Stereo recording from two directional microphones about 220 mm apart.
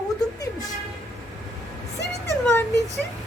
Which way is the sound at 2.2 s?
10° left (ahead or behind).